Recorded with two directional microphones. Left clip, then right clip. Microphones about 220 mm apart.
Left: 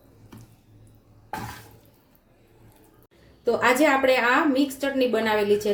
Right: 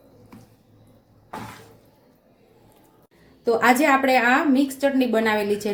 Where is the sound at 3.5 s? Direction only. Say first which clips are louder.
Right 2 dB; 25° right (ahead or behind).